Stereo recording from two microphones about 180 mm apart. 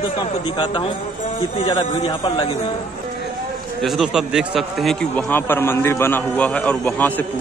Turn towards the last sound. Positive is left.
turn(degrees=10)  # may be behind; listen again after turning